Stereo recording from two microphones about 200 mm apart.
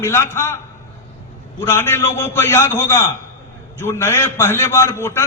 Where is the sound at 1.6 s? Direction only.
10° left (ahead or behind).